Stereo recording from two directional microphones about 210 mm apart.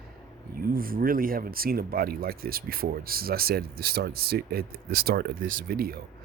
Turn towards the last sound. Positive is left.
turn(degrees=-45)  # may be behind; listen again after turning